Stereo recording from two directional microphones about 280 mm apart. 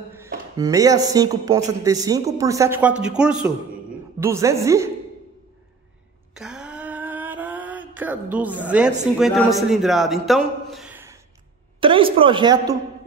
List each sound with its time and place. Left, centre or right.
0.6 s a man's voice: centre
6.3 s a sound: centre
7.9 s a woman's voice: centre
11.8 s speech: centre